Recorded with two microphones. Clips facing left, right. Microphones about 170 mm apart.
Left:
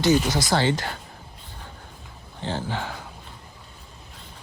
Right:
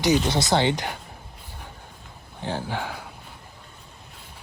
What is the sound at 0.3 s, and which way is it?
Speech, 25° right (ahead or behind).